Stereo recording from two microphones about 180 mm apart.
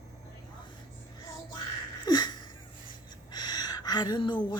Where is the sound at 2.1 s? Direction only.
25° left (ahead or behind).